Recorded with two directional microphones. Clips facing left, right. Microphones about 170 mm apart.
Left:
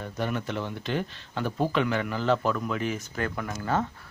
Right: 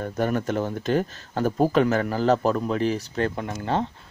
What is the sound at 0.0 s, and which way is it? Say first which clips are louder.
Speech: right 6 dB; 45° right (ahead or behind).